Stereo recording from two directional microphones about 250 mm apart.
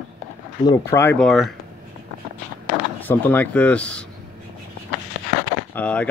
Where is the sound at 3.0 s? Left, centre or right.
Centre.